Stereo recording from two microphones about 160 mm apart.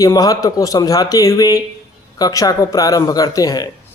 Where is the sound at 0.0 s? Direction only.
20° left (ahead or behind).